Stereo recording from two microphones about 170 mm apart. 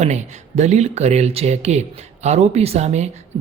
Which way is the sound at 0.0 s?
40° right (ahead or behind).